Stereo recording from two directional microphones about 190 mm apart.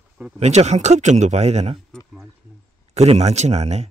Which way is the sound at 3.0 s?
35° right (ahead or behind).